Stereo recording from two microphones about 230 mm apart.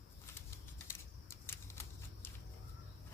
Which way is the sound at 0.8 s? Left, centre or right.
Centre.